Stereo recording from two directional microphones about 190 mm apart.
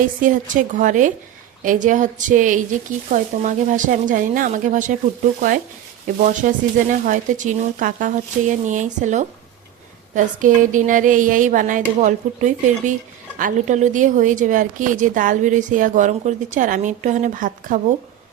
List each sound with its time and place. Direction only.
0.0 s a woman's voice: 45° right (ahead or behind)
6.1 s a woman's voice: 45° right (ahead or behind)